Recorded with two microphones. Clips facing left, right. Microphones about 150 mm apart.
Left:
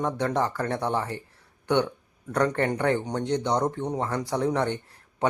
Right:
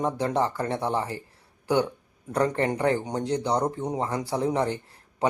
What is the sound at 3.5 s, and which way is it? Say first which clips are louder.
Speech: even; 5° right (ahead or behind).